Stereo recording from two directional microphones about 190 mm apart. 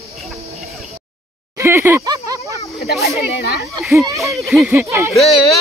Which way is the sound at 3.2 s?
55° left (ahead or behind).